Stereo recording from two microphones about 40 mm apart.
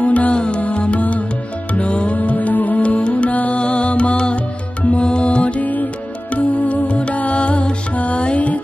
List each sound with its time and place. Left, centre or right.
0.0 s music: left
2.1 s music: left
2.8 s music: left